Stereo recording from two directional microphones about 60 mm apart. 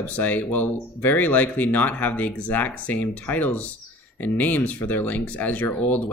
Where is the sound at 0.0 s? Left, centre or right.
Left.